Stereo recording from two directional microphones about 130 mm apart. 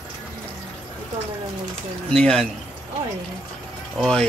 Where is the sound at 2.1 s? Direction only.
5° left (ahead or behind).